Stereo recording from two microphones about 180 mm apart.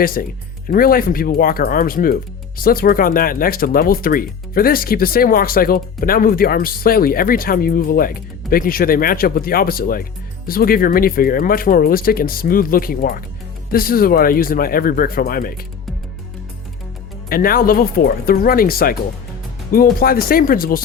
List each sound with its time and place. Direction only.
0.0 s speech: 50° left (ahead or behind)
17.2 s speech: 55° left (ahead or behind)